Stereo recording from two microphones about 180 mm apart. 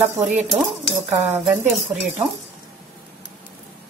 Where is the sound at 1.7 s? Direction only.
Centre (ahead or behind).